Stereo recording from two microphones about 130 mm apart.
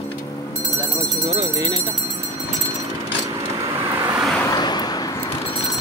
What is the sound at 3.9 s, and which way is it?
Vehicle, 15° right (ahead or behind).